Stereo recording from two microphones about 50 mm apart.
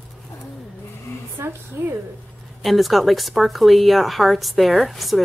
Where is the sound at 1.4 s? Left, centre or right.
Right.